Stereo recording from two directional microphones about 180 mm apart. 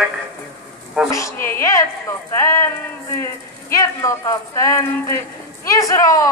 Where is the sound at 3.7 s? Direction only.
15° left (ahead or behind).